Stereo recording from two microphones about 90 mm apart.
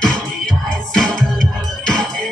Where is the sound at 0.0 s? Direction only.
5° left (ahead or behind).